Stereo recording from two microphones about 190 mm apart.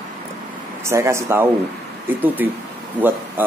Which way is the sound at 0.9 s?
15° right (ahead or behind).